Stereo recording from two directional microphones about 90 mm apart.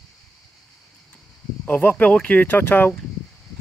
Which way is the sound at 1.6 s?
25° left (ahead or behind).